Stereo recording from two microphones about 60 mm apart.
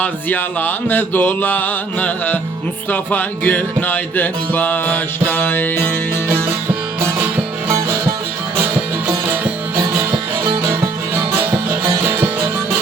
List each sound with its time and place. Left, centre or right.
0.0 s mantra: left
2.9 s music: left
12.0 s music: right